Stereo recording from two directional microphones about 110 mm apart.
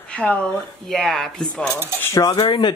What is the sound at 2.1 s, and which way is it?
Cutlery, 35° left (ahead or behind).